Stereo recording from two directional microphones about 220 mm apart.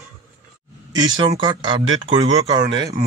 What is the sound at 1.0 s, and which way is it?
Speech, 20° right (ahead or behind).